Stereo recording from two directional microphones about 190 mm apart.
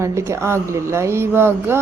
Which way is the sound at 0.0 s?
15° right (ahead or behind).